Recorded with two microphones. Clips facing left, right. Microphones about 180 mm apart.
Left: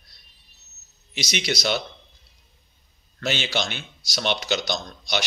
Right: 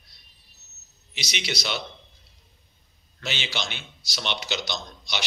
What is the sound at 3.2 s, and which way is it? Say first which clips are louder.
Speech: left 6 dB; 45° left (ahead or behind).